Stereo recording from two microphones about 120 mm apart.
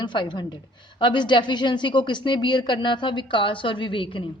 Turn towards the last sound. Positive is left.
turn(degrees=45)  # may be behind; listen again after turning